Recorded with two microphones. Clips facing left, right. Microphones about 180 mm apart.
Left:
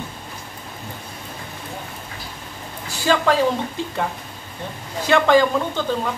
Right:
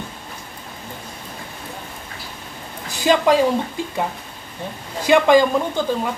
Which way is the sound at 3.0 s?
15° right (ahead or behind).